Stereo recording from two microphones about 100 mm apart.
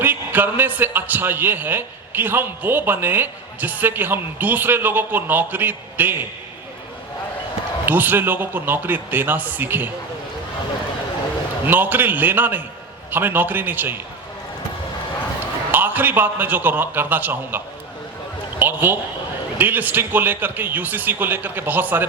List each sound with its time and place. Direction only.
0.0 s a man's voice: 20° right (ahead or behind)
7.9 s a man's voice: 20° right (ahead or behind)
11.6 s a man's voice: 20° right (ahead or behind)
15.7 s a man's voice: 20° right (ahead or behind)
18.6 s a man's voice: 20° right (ahead or behind)